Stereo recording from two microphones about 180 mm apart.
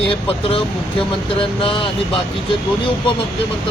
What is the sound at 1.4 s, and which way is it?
Speech, 30° left (ahead or behind).